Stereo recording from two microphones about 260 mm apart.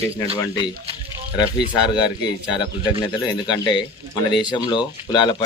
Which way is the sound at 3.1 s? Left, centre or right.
Centre.